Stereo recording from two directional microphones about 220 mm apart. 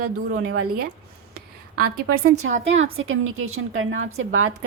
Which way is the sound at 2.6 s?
65° right (ahead or behind).